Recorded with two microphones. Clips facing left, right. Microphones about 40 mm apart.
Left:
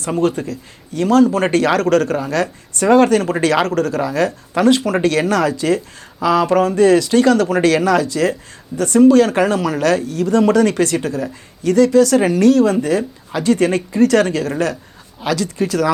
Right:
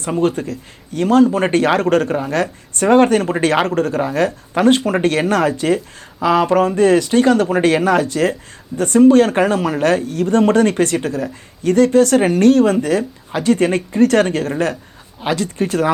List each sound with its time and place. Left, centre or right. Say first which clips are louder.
0.2 s speech: even; right